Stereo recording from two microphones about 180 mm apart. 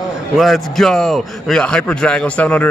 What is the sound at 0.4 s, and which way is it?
A man's voice, centre (ahead or behind).